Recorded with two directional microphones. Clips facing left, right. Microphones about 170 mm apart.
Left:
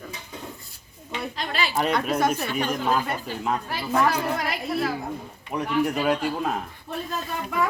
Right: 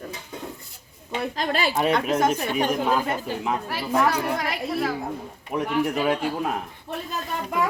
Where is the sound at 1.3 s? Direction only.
45° right (ahead or behind).